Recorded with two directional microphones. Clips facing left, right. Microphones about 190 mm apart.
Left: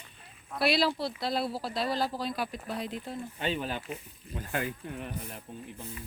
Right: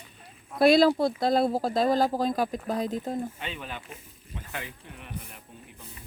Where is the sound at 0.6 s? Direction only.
45° right (ahead or behind).